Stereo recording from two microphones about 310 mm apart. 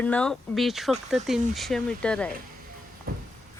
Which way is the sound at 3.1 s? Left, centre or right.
Right.